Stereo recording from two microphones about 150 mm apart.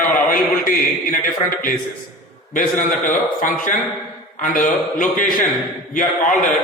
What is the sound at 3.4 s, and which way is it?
A man's voice, 60° left (ahead or behind).